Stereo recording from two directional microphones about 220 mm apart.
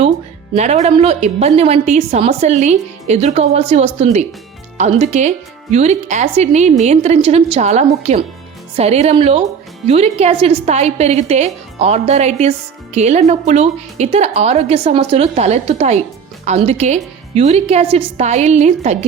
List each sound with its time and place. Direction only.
0.5 s a woman's voice: 30° right (ahead or behind)